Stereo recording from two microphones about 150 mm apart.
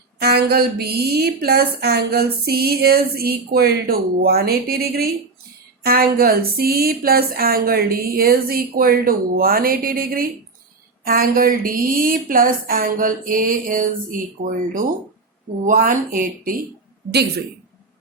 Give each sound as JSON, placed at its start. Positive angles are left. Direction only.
{"t": 0.2, "sound": "a woman's voice", "side_deg": -90}
{"t": 15.6, "sound": "speech", "side_deg": -65}
{"t": 17.1, "sound": "a woman's voice", "side_deg": -90}